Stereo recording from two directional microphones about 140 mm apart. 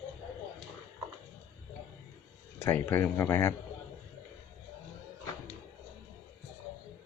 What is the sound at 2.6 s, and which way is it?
Speech, 15° left (ahead or behind).